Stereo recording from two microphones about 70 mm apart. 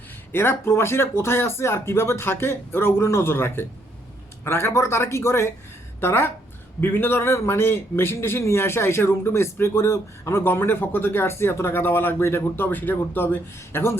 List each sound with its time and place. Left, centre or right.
0.3 s a man's voice: left